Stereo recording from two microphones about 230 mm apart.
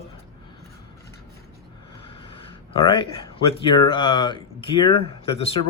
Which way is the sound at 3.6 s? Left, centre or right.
Centre.